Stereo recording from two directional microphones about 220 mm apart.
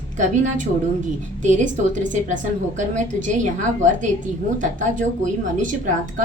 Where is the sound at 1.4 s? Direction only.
35° right (ahead or behind).